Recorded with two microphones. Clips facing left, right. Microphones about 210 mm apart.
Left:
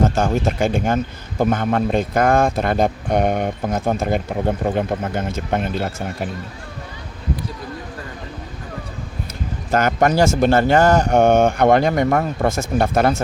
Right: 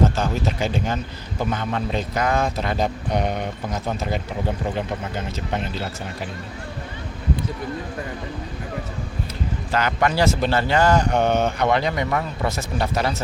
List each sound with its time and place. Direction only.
0.2 s speech: 50° left (ahead or behind)
9.7 s speech: 45° left (ahead or behind)